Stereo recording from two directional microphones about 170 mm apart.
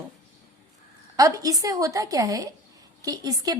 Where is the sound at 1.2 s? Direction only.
20° right (ahead or behind).